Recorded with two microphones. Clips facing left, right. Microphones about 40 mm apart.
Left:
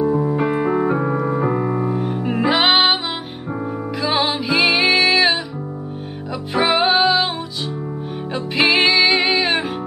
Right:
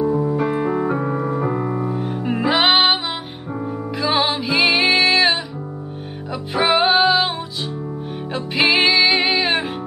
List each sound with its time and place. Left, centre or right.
0.0 s music: centre
2.0 s music: centre
6.5 s music: centre
8.3 s music: centre